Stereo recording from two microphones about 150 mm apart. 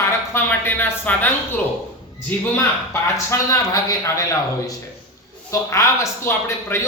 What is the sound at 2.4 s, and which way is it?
A man's voice, 15° left (ahead or behind).